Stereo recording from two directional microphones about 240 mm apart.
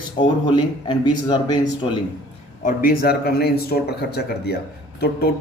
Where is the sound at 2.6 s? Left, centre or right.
Left.